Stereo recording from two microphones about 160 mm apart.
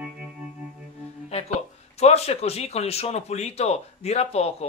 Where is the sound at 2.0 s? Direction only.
40° left (ahead or behind).